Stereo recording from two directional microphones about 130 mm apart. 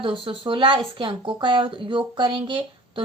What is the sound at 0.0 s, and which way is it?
Speech, 40° right (ahead or behind).